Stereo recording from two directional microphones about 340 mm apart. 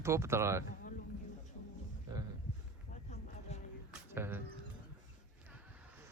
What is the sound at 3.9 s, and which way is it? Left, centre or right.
Music, centre.